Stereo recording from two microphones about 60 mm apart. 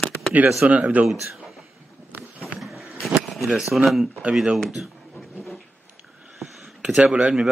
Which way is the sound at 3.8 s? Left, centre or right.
Centre.